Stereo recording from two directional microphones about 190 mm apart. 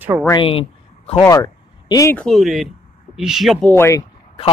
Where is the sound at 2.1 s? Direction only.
Centre (ahead or behind).